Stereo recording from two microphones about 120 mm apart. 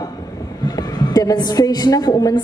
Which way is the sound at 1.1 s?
35° left (ahead or behind).